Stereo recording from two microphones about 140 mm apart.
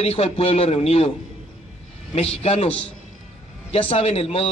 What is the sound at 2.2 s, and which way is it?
A man's voice, 45° left (ahead or behind).